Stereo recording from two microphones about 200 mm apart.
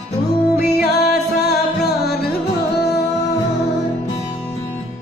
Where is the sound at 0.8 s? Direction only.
55° left (ahead or behind).